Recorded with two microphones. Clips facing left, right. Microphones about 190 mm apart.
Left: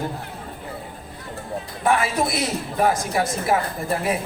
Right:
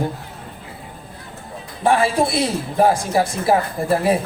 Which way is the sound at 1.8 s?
30° right (ahead or behind).